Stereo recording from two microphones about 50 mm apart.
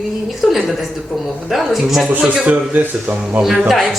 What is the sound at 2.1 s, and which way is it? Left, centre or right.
Speech, right.